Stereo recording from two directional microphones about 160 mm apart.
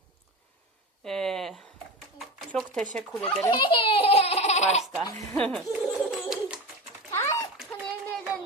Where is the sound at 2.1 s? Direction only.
Centre (ahead or behind).